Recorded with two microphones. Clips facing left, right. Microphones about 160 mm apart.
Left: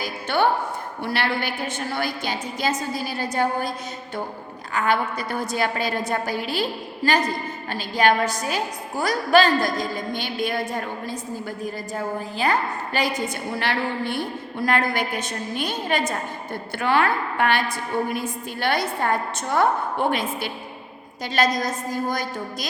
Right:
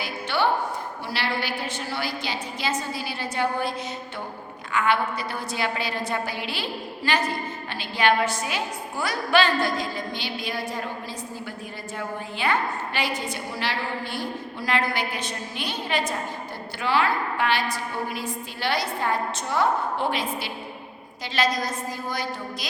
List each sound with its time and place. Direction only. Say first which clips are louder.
0.0 s a sound: left 3 dB; 45° left (ahead or behind)
1.0 s a woman's voice: left 4 dB; 55° left (ahead or behind)
4.7 s a woman's voice: left 1 dB; 40° left (ahead or behind)
11.6 s a woman's voice: left 5 dB; 40° left (ahead or behind)
13.6 s a woman's voice: left 5 dB; 55° left (ahead or behind)